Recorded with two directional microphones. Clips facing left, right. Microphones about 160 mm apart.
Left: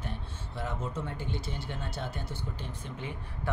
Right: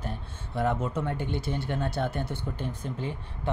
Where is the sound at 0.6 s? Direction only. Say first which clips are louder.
Right 8 dB; 60° right (ahead or behind).